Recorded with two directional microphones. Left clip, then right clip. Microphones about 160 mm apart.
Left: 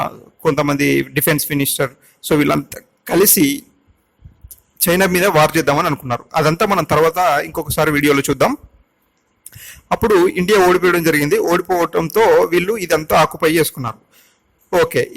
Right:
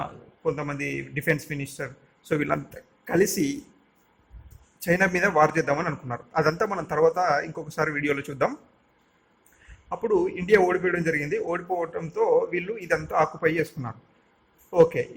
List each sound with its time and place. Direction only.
0.0 s a man's voice: 50° left (ahead or behind)
10.2 s a man's voice: 55° left (ahead or behind)